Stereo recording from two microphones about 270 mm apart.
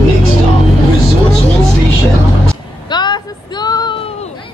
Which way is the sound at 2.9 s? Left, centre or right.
Centre.